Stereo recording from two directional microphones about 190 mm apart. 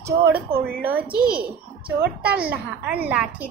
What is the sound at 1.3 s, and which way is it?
Speech, 50° right (ahead or behind).